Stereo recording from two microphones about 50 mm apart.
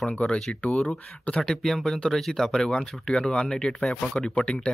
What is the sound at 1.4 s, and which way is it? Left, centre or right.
Speech, centre.